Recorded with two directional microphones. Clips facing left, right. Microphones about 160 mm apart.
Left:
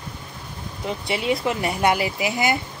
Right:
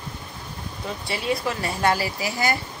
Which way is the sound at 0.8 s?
20° left (ahead or behind).